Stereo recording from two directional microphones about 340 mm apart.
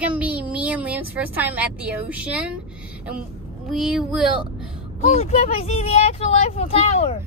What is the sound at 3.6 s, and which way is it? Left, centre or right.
Speech, centre.